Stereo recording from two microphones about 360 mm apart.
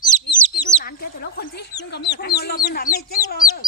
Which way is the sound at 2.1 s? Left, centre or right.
Left.